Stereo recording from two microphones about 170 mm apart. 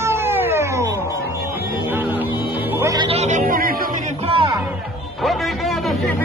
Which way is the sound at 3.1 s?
40° right (ahead or behind).